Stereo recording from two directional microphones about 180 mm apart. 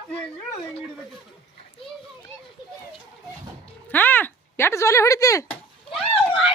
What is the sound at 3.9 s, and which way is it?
Speech, 10° left (ahead or behind).